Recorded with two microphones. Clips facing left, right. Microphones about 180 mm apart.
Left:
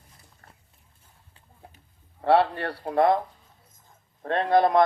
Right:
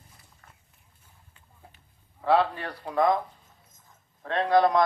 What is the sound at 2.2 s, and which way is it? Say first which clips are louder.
Speech: left 3 dB; 65° left (ahead or behind).